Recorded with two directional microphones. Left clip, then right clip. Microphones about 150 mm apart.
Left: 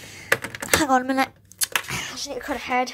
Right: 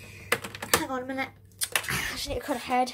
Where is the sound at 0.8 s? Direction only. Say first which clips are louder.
Left 12 dB; 65° left (ahead or behind).